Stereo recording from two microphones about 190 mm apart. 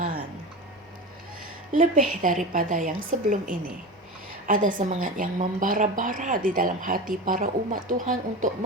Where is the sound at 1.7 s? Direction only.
45° right (ahead or behind).